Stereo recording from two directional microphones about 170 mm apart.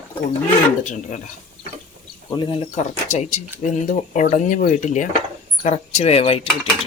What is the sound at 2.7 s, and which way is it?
Speech, 40° left (ahead or behind).